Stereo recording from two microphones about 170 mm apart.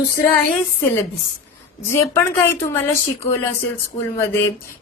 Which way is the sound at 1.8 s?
15° left (ahead or behind).